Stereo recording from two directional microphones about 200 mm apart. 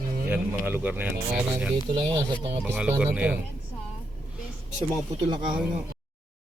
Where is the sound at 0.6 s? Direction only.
10° right (ahead or behind).